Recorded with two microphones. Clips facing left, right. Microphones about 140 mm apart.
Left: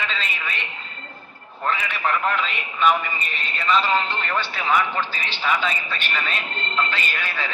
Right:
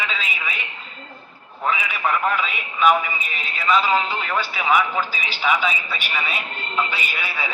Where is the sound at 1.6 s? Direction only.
5° right (ahead or behind).